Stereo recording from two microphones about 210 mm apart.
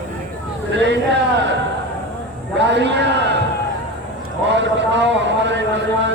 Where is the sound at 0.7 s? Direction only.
55° right (ahead or behind).